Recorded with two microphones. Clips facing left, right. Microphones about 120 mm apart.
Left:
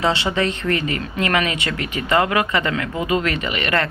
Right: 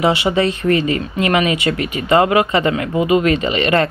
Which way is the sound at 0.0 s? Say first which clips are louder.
Right 5 dB; 20° right (ahead or behind).